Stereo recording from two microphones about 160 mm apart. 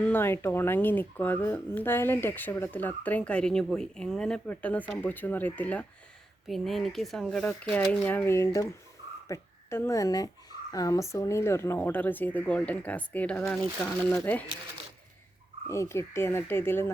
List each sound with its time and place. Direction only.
0.0 s speech: 15° left (ahead or behind)
15.7 s speech: 15° left (ahead or behind)